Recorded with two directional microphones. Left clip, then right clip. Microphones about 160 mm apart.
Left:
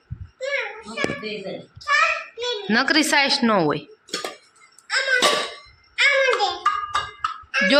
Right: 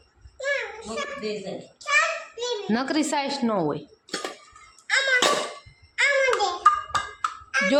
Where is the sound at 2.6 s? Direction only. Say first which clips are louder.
Left 9 dB; 5° right (ahead or behind); by 4.2 s 15° left (ahead or behind).